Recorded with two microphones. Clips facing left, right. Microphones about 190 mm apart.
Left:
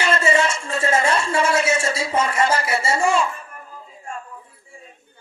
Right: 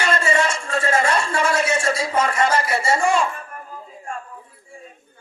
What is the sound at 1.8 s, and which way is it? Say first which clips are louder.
Speech: right 1 dB; 25° left (ahead or behind).